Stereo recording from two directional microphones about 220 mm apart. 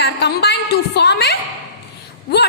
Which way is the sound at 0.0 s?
50° left (ahead or behind).